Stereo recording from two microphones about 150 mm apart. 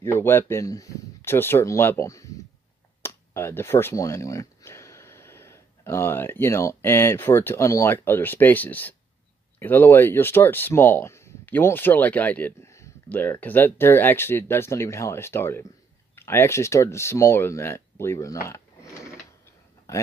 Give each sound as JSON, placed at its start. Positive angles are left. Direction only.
{"t": 0.0, "sound": "speech", "side_deg": 15}